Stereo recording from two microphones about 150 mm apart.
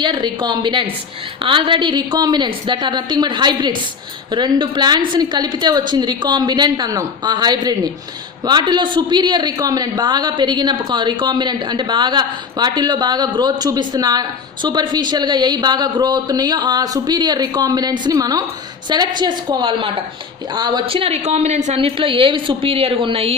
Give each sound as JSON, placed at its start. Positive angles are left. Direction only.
{"t": 0.0, "sound": "a woman's voice", "side_deg": -30}